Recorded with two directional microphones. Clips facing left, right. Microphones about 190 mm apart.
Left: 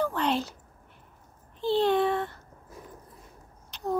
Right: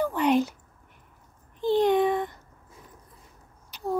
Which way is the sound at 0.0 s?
15° right (ahead or behind).